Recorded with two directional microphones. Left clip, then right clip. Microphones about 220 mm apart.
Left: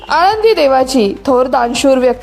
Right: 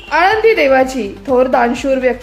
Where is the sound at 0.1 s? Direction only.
30° left (ahead or behind).